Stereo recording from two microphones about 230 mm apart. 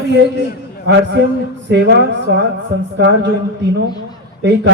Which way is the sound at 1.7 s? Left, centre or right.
Right.